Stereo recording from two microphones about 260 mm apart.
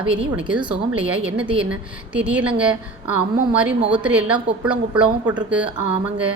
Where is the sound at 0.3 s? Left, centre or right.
Centre.